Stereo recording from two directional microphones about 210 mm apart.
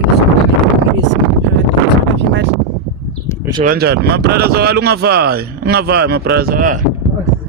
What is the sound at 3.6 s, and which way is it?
Speech, 45° right (ahead or behind).